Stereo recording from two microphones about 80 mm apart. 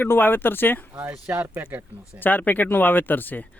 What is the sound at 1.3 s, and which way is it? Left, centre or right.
Speech, right.